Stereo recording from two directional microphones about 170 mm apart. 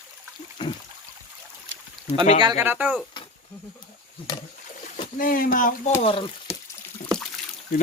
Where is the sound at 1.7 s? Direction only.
90° right.